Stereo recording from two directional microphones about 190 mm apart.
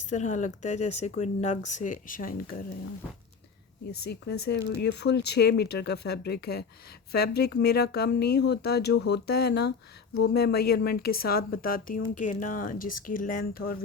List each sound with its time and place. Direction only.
0.1 s speech: 40° left (ahead or behind)
4.1 s speech: 55° left (ahead or behind)